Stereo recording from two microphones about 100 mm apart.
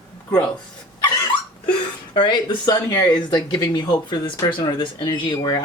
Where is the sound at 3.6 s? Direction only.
45° left (ahead or behind).